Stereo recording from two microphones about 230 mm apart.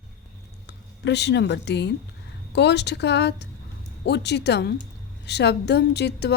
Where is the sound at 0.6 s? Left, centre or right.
Left.